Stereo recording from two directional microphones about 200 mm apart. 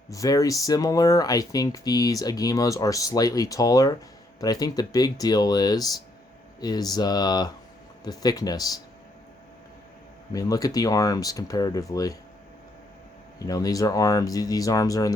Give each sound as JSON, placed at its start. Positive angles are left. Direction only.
{"t": 0.1, "sound": "speech", "side_deg": 15}
{"t": 10.3, "sound": "speech", "side_deg": 20}
{"t": 13.4, "sound": "speech", "side_deg": 20}